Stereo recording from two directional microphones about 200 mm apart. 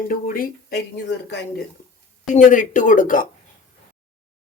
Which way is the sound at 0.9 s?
55° left (ahead or behind).